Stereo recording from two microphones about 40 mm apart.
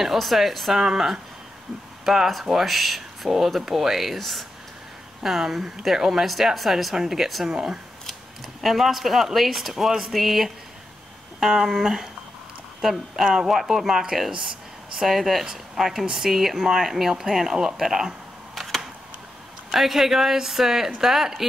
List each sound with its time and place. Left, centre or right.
0.0 s speech: centre
2.0 s speech: centre
5.2 s speech: centre
7.4 s speech: centre
8.5 s speech: centre
13.1 s speech: centre
18.6 s camera: centre
19.7 s speech: centre